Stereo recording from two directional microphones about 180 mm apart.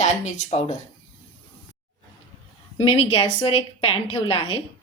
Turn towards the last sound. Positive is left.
turn(degrees=35)  # may be behind; listen again after turning